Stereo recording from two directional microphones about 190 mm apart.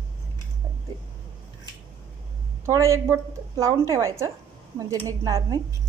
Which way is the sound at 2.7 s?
15° right (ahead or behind).